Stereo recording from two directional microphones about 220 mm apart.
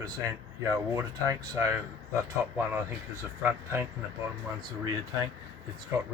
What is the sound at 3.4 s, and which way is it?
Speech, 10° right (ahead or behind).